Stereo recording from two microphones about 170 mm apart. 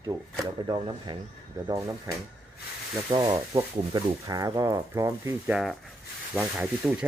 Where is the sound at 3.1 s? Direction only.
30° right (ahead or behind).